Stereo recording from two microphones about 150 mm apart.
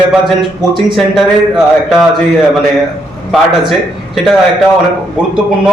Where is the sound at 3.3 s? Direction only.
Centre (ahead or behind).